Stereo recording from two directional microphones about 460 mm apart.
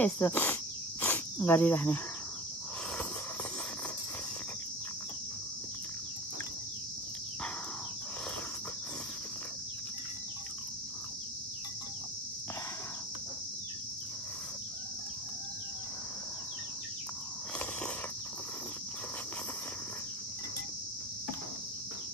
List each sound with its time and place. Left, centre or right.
0.0 s cricket: centre